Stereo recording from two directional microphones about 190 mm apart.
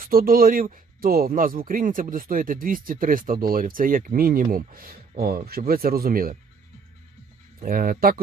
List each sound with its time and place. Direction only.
0.0 s speech: 50° right (ahead or behind)
7.6 s speech: 45° right (ahead or behind)